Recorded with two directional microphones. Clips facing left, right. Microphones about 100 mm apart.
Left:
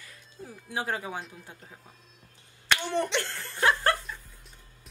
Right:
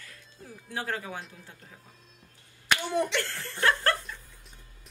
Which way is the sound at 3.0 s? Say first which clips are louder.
Even; 20° left (ahead or behind).